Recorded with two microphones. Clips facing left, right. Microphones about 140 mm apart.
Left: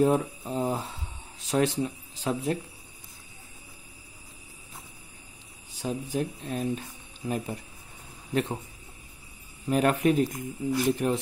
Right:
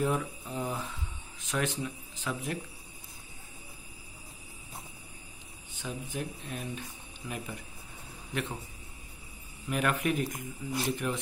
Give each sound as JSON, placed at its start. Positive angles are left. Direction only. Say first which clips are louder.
{"t": 0.0, "sound": "a sound", "louder": "left 7 dB", "side_deg": 35}
{"t": 1.4, "sound": "speech", "louder": "left 7 dB", "side_deg": 35}
{"t": 5.8, "sound": "speech", "louder": "left 8 dB", "side_deg": 35}
{"t": 9.7, "sound": "speech", "louder": "left 7 dB", "side_deg": 35}